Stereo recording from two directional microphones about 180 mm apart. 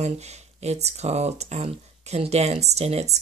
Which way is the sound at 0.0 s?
35° right (ahead or behind).